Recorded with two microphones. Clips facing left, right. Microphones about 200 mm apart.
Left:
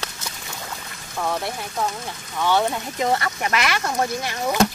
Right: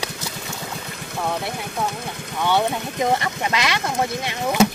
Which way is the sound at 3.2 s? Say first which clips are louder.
Even; 20° right (ahead or behind).